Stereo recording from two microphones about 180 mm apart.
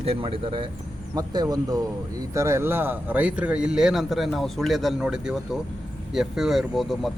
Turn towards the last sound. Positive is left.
turn(degrees=0)  # may be behind; listen again after turning